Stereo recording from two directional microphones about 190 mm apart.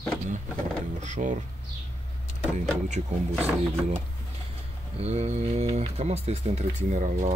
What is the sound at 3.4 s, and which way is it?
Speech, 40° right (ahead or behind).